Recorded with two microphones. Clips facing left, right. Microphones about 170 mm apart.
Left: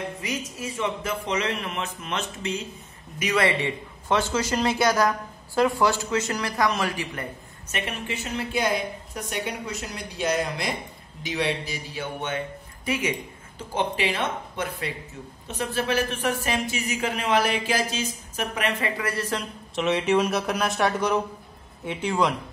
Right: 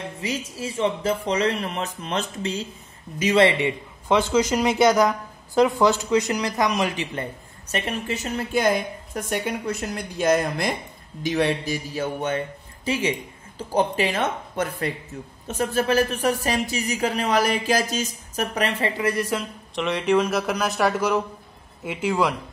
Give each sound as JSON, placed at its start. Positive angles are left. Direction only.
{"t": 0.2, "sound": "a woman's voice", "side_deg": -30}
{"t": 7.6, "sound": "a woman's voice", "side_deg": -40}
{"t": 13.6, "sound": "a woman's voice", "side_deg": -40}
{"t": 19.0, "sound": "a woman's voice", "side_deg": -15}
{"t": 19.7, "sound": "speech", "side_deg": 0}